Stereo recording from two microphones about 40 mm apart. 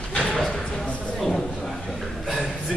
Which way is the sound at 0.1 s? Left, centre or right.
Left.